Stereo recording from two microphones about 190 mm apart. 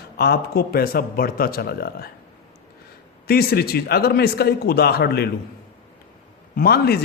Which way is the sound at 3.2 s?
55° left (ahead or behind).